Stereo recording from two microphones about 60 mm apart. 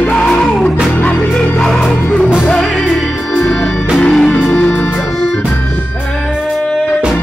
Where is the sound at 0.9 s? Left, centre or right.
Left.